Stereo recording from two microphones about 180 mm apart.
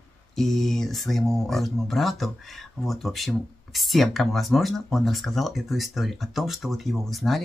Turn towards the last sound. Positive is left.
turn(degrees=0)  # may be behind; listen again after turning